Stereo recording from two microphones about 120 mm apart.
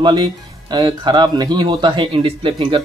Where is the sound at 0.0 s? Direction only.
40° right (ahead or behind).